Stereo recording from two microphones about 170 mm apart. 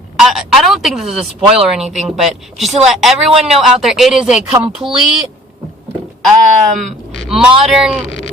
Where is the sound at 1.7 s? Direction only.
5° right (ahead or behind).